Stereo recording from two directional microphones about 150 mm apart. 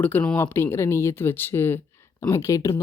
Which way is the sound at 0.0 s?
10° left (ahead or behind).